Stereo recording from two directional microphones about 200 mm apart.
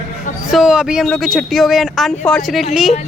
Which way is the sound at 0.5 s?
Centre (ahead or behind).